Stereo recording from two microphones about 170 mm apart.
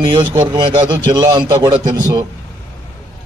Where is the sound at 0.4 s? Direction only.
25° right (ahead or behind).